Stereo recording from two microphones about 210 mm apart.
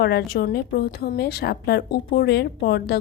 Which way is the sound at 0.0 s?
50° left (ahead or behind).